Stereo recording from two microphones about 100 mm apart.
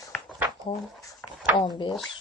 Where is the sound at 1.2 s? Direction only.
15° left (ahead or behind).